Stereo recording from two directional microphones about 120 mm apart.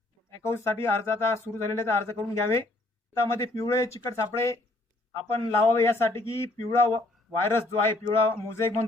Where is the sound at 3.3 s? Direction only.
25° left (ahead or behind).